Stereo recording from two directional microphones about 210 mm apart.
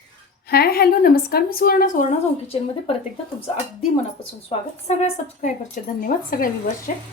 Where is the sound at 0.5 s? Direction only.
50° left (ahead or behind); by 2.9 s 30° left (ahead or behind).